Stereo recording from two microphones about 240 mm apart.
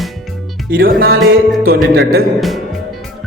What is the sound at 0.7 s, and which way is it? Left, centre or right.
Speech, right.